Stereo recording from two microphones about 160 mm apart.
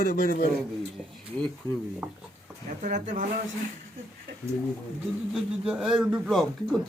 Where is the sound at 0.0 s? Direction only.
65° left (ahead or behind).